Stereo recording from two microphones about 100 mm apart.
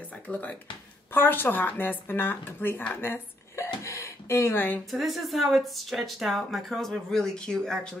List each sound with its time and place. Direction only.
0.1 s speech: 15° left (ahead or behind)
4.9 s speech: centre (ahead or behind)